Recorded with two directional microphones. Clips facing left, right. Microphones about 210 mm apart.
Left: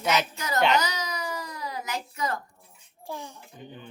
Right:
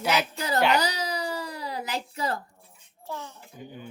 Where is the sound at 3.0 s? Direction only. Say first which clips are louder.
Even; 15° left (ahead or behind).